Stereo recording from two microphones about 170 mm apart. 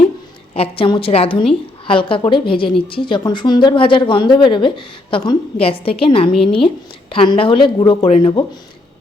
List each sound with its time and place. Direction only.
0.5 s speech: 35° left (ahead or behind)